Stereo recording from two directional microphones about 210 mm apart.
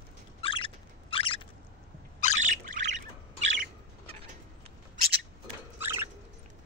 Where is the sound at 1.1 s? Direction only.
25° left (ahead or behind).